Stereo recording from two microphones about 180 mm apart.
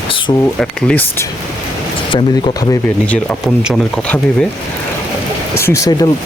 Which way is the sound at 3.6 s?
5° left (ahead or behind).